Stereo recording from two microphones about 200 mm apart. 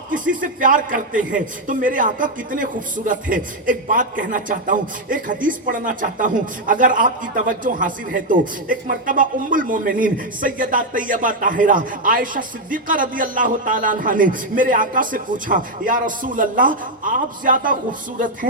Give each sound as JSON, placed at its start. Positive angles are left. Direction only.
{"t": 0.1, "sound": "a man's voice", "side_deg": -45}